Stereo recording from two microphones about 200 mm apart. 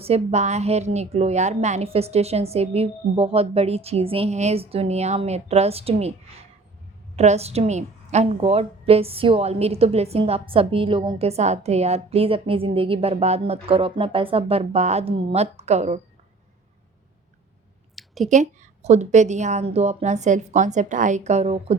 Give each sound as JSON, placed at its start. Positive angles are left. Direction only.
{"t": 0.0, "sound": "a woman's voice", "side_deg": -30}
{"t": 7.2, "sound": "a woman's voice", "side_deg": -30}
{"t": 17.9, "sound": "a sound", "side_deg": 0}
{"t": 18.3, "sound": "a woman's voice", "side_deg": -35}